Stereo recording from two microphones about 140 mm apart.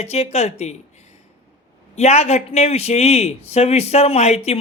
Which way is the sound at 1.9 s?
50° left (ahead or behind).